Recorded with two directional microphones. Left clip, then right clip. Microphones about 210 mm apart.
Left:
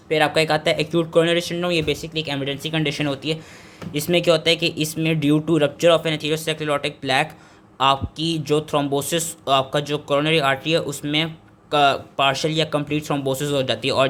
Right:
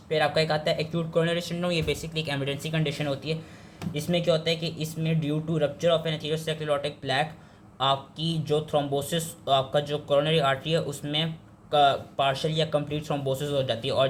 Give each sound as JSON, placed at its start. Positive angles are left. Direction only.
{"t": 0.1, "sound": "a man's voice", "side_deg": 30}